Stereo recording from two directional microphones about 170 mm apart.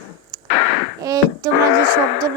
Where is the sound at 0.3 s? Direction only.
20° right (ahead or behind).